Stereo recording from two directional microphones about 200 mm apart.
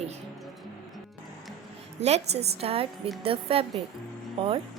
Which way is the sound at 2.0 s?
30° right (ahead or behind).